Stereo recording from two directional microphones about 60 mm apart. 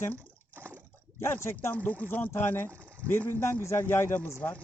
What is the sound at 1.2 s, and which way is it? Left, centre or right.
Speech, left.